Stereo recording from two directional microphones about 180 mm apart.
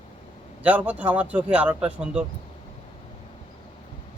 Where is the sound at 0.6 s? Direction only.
5° right (ahead or behind).